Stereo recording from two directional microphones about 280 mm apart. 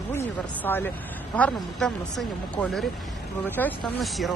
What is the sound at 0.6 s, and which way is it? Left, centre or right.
Speech, centre.